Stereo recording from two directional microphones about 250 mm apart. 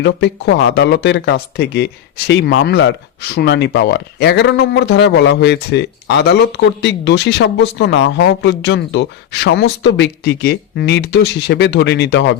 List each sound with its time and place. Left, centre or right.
0.0 s speech: left